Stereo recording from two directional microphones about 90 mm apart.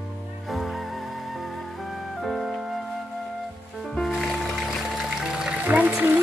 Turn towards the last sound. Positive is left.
turn(degrees=-20)  # may be behind; listen again after turning